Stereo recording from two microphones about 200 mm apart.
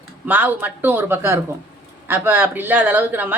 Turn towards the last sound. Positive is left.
turn(degrees=-10)  # may be behind; listen again after turning